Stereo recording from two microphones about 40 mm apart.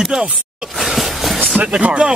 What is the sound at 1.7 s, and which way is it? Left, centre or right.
Speech, right.